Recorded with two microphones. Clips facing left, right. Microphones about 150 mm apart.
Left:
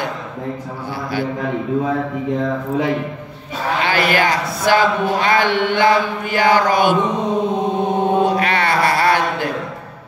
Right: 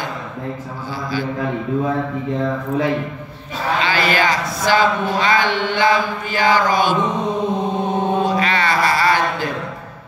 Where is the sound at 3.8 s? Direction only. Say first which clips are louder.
Left 2 dB; 60° left (ahead or behind).